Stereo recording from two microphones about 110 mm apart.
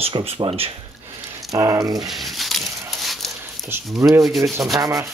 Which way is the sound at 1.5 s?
30° right (ahead or behind).